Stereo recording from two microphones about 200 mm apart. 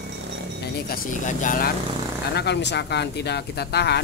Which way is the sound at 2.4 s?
60° left (ahead or behind).